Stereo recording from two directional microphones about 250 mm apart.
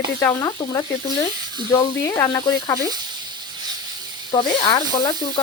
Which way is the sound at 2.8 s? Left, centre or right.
Centre.